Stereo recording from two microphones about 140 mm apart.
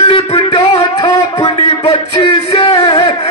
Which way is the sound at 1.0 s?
40° left (ahead or behind).